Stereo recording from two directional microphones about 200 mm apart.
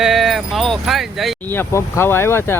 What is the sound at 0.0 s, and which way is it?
Sheep, centre (ahead or behind).